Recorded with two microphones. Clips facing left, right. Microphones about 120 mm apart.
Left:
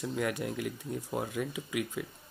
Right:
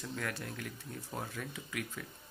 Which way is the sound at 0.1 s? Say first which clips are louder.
Left 7 dB; 15° left (ahead or behind).